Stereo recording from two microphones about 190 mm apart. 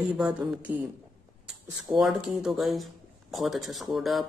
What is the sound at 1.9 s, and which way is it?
Speech, centre (ahead or behind).